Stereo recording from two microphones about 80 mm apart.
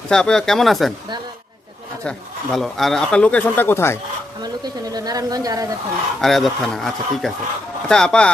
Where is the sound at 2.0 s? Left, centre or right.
Centre; by 4.0 s left.